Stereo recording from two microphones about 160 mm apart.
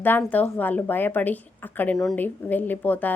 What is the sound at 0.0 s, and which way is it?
A woman's voice, 10° left (ahead or behind).